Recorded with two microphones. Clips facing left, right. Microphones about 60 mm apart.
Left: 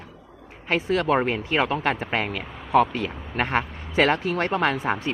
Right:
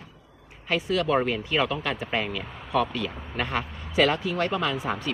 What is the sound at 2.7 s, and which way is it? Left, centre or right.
Speech, left.